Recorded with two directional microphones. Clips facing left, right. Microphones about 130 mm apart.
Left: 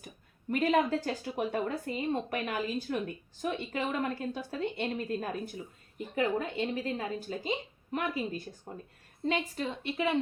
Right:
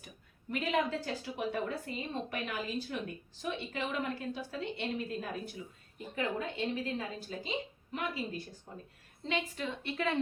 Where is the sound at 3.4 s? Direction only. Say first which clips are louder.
Left 4 dB; 45° left (ahead or behind).